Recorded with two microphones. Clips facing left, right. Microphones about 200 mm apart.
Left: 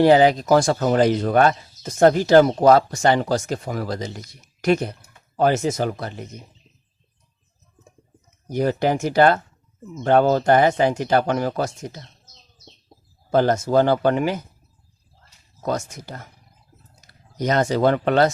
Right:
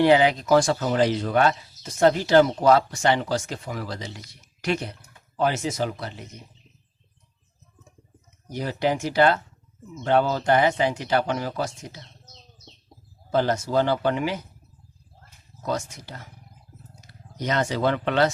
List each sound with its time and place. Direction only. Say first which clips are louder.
0.0 s speech: left 4 dB; 40° left (ahead or behind)
8.4 s speech: left 5 dB; 50° left (ahead or behind)
13.3 s speech: left 5 dB; 50° left (ahead or behind)
15.6 s speech: left 3 dB; 45° left (ahead or behind)
17.3 s speech: left 5 dB; 40° left (ahead or behind)